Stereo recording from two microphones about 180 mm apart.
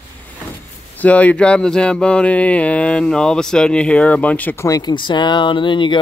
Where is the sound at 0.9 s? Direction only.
10° left (ahead or behind).